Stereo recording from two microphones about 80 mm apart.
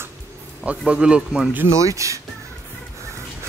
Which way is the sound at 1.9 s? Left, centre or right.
Right.